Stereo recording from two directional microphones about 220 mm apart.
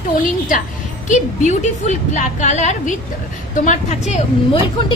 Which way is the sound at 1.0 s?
35° left (ahead or behind).